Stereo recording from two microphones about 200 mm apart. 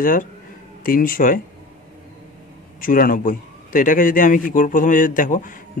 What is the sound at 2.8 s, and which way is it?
A man's voice, 45° left (ahead or behind).